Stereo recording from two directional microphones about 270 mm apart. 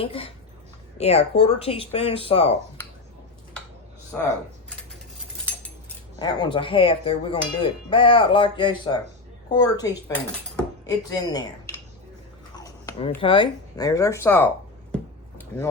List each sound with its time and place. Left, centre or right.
0.0 s speech: centre
6.1 s speech: centre
12.5 s chewing: centre
13.2 s speech: centre